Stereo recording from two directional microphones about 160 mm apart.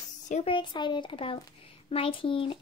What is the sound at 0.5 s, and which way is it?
Speech, 30° left (ahead or behind).